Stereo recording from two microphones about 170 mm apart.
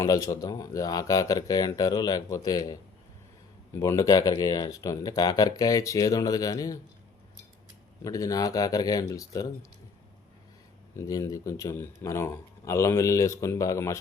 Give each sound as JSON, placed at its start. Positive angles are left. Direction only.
{"t": 0.0, "sound": "speech", "side_deg": 20}
{"t": 3.8, "sound": "speech", "side_deg": 20}
{"t": 8.0, "sound": "speech", "side_deg": 20}
{"t": 10.9, "sound": "speech", "side_deg": 20}